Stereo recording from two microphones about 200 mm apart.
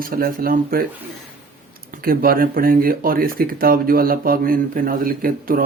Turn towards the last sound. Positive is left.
turn(degrees=-45)  # may be behind; listen again after turning